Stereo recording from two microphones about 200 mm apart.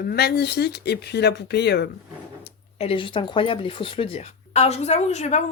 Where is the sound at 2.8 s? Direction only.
25° left (ahead or behind).